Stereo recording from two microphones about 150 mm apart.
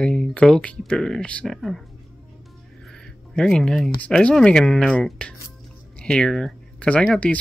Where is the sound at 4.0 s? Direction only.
5° left (ahead or behind).